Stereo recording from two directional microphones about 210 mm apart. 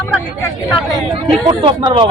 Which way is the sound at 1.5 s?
20° right (ahead or behind).